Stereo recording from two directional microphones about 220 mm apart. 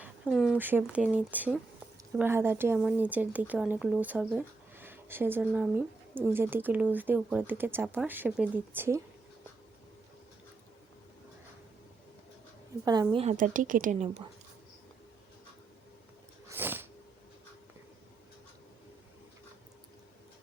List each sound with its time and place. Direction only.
0.0 s speech: centre (ahead or behind)
12.8 s a woman's voice: 20° right (ahead or behind)
16.5 s sneeze: 10° right (ahead or behind)